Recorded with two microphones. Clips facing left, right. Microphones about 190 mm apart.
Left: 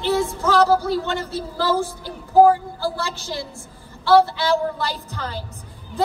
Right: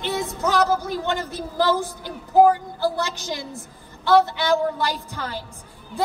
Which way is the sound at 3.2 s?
15° right (ahead or behind).